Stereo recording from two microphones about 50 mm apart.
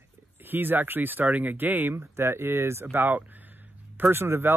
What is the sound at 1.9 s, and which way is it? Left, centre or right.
Speech, right.